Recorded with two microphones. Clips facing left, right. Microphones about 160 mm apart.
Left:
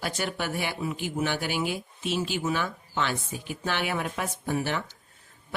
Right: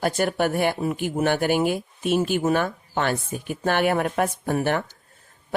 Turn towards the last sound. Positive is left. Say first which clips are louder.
# right 6 dB
turn(degrees=-55)  # may be behind; listen again after turning